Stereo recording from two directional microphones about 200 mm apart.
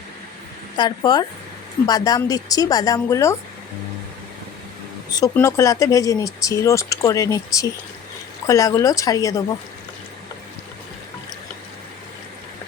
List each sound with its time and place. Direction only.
0.8 s a woman's voice: 20° left (ahead or behind)
5.1 s speech: 15° left (ahead or behind)